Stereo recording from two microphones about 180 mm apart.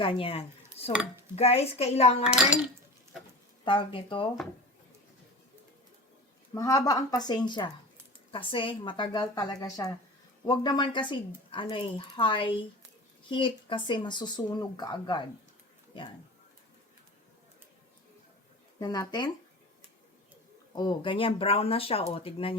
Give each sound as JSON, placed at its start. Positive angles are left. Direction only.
{"t": 0.0, "sound": "speech", "side_deg": 30}
{"t": 0.8, "sound": "dishes", "side_deg": 35}
{"t": 1.4, "sound": "speech", "side_deg": 35}
{"t": 2.2, "sound": "a child's voice", "side_deg": -5}
{"t": 3.6, "sound": "speech", "side_deg": 25}
{"t": 6.5, "sound": "speech", "side_deg": 20}
{"t": 18.8, "sound": "speech", "side_deg": 20}
{"t": 20.7, "sound": "speech", "side_deg": 25}